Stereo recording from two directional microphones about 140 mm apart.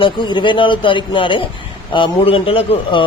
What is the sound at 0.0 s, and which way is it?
Speech, 35° left (ahead or behind).